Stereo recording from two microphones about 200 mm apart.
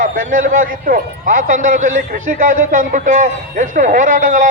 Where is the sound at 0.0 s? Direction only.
40° right (ahead or behind).